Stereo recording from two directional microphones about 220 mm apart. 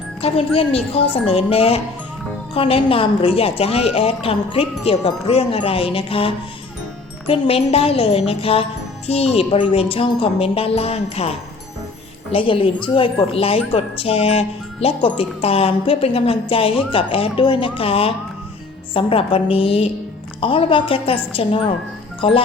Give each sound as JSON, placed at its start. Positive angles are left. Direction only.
{"t": 0.2, "sound": "speech", "side_deg": 25}